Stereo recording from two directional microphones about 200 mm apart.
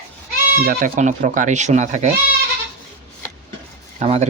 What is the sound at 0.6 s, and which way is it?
Speech, 45° right (ahead or behind).